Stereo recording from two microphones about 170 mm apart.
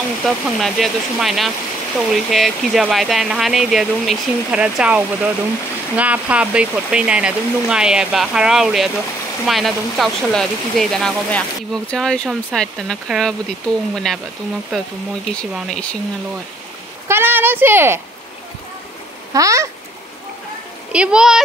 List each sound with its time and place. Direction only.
0.2 s speech: centre (ahead or behind)
15.5 s speech: 5° left (ahead or behind)
17.1 s speech: 10° right (ahead or behind)
19.3 s speech: 20° right (ahead or behind)
20.9 s speech: 5° right (ahead or behind)